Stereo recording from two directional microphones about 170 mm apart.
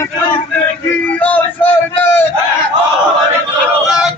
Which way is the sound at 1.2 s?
10° left (ahead or behind).